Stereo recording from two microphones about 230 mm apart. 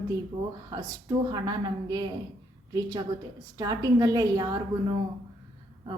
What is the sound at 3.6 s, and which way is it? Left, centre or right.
A woman's voice, centre.